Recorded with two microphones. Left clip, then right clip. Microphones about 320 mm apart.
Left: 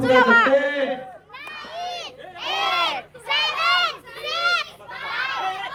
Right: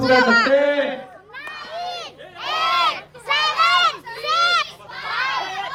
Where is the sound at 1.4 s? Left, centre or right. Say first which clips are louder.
Right 2 dB; right.